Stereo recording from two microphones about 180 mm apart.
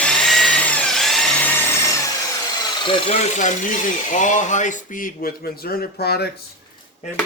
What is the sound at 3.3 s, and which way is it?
Speech, 45° left (ahead or behind).